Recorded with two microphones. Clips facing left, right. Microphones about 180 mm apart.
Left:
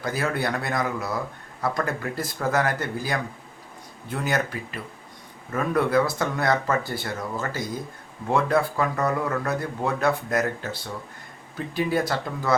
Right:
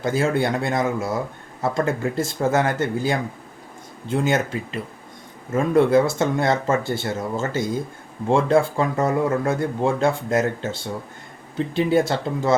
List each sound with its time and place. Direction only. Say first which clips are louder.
0.0 s speech: right 6 dB; 25° right (ahead or behind)